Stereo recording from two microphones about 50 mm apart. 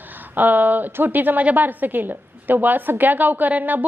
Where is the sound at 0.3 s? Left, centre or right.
Right.